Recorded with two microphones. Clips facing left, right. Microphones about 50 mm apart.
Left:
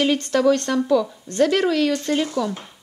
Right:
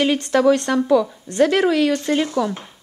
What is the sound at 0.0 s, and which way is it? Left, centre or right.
Speech, centre.